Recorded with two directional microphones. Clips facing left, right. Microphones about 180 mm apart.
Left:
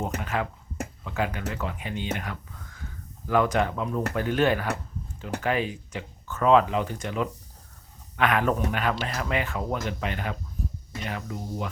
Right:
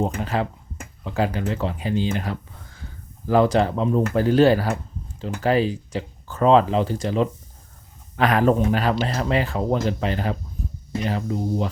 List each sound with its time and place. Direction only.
0.2 s speech: 30° right (ahead or behind)